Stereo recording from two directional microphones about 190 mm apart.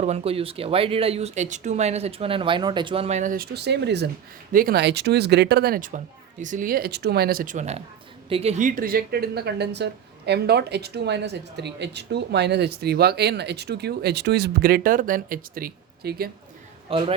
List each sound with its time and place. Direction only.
0.0 s speech: 35° right (ahead or behind); by 16.3 s 55° right (ahead or behind)
16.9 s speech: 30° right (ahead or behind)